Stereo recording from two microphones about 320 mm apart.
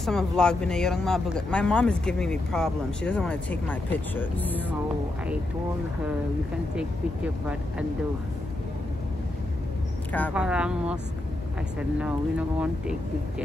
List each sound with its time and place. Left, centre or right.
0.0 s speech: centre
10.1 s speech: centre
12.0 s speech: centre